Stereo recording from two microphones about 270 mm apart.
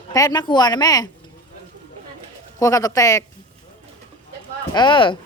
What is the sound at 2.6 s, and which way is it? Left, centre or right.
Speech, centre.